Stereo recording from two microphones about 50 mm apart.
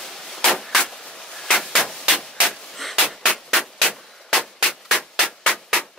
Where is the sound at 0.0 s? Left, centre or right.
Centre.